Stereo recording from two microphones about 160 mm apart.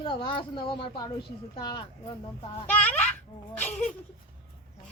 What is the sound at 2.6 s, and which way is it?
Speech, 10° left (ahead or behind).